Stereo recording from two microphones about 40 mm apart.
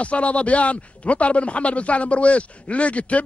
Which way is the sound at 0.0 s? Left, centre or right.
Left.